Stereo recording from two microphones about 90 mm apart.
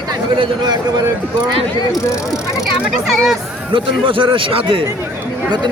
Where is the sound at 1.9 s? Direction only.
35° left (ahead or behind).